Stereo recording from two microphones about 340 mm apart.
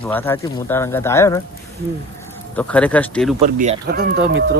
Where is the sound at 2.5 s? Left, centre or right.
Centre.